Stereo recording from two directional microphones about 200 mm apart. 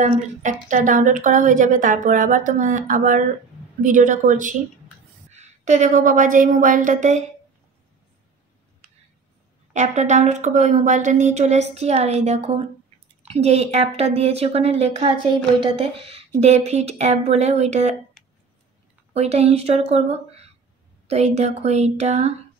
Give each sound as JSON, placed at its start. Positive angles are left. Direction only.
{"t": 0.0, "sound": "a woman's voice", "side_deg": -40}
{"t": 9.8, "sound": "a woman's voice", "side_deg": -35}
{"t": 18.2, "sound": "a sound", "side_deg": 0}
{"t": 19.1, "sound": "a woman's voice", "side_deg": -30}